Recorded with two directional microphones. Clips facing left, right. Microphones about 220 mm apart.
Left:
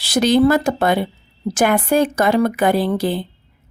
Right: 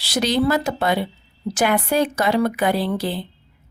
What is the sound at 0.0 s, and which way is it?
A woman's voice, 50° left (ahead or behind).